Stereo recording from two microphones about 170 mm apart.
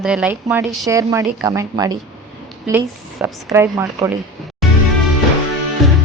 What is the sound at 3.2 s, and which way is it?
Speech, 15° right (ahead or behind).